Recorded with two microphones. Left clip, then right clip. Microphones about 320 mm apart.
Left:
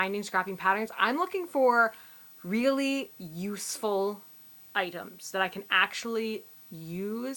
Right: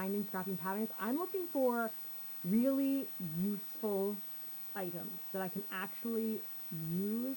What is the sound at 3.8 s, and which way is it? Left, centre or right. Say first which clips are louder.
Speech: left 8 dB; centre.